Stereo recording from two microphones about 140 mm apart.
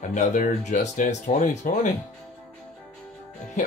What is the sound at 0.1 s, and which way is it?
Speech, 65° left (ahead or behind).